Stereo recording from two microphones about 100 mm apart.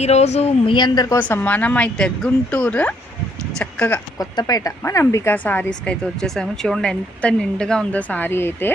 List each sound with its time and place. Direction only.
0.0 s speech: 90° left
0.7 s a woman's voice: 45° left (ahead or behind)
1.2 s speech: 20° left (ahead or behind)
4.2 s speech: 40° left (ahead or behind)
5.3 s speech: 20° left (ahead or behind)